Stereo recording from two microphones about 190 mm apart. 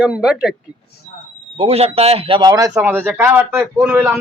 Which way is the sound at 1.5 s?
30° right (ahead or behind).